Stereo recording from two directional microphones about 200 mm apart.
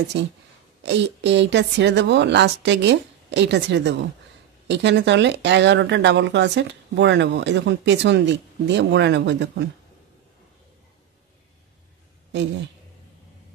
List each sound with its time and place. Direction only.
0.1 s speech: 60° right (ahead or behind)